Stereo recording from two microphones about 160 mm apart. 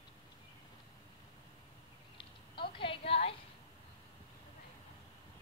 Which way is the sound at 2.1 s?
30° left (ahead or behind).